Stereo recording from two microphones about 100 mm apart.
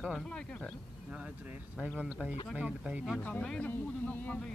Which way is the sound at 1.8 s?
5° right (ahead or behind).